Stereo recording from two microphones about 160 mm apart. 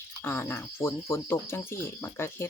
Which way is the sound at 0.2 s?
15° left (ahead or behind).